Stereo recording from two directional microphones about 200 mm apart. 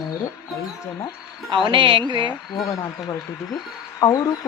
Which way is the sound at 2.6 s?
15° left (ahead or behind).